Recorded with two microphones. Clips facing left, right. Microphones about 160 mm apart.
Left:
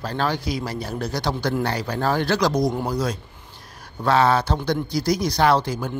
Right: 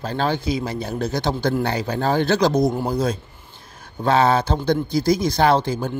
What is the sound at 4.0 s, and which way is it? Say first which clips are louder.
Speech: right 1 dB; 25° right (ahead or behind).